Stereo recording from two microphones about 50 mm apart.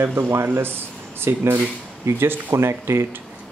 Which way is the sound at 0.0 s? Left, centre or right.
Right.